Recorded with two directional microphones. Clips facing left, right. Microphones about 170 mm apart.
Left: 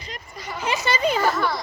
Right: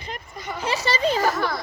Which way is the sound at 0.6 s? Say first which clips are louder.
Even; 35° right (ahead or behind).